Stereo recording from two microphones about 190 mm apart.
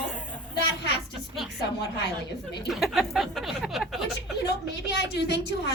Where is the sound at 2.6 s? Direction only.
Centre (ahead or behind).